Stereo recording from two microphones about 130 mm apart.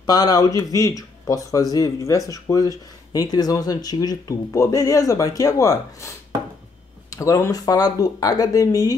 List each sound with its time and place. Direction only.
0.0 s speech: 30° left (ahead or behind)